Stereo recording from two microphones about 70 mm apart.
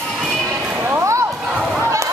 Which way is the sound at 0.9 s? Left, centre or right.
Right.